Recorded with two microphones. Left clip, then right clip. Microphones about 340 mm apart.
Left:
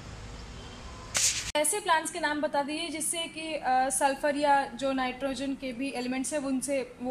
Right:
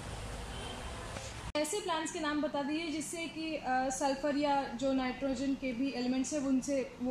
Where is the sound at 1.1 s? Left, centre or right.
Left.